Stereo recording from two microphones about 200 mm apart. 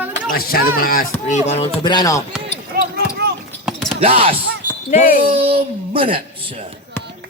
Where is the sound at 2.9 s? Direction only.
55° right (ahead or behind).